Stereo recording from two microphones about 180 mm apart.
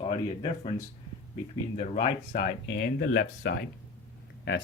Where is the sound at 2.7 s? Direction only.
60° left (ahead or behind).